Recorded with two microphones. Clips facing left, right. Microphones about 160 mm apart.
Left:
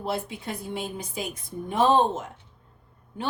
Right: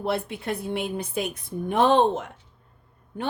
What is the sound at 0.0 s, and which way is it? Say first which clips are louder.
A woman's voice: right 3 dB; 65° right (ahead or behind).